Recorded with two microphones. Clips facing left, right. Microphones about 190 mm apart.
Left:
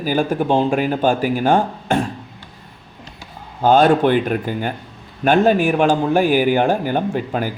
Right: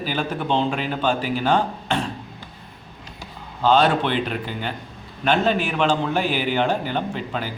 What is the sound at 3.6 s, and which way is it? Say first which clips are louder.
A man's voice: left 5 dB; 50° left (ahead or behind).